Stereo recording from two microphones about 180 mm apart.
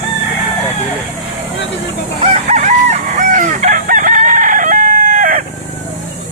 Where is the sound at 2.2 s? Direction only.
40° right (ahead or behind).